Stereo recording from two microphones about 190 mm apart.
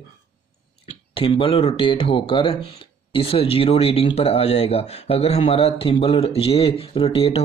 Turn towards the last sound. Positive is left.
turn(degrees=30)  # may be behind; listen again after turning